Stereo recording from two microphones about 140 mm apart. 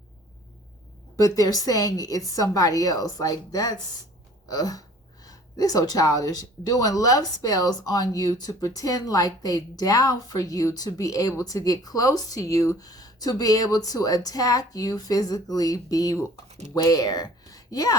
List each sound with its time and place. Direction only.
1.1 s speech: 25° left (ahead or behind)
16.5 s a sound: 55° right (ahead or behind)
16.7 s speech: 25° left (ahead or behind)